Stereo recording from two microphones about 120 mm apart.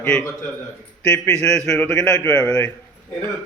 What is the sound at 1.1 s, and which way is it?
A man's voice, 10° left (ahead or behind).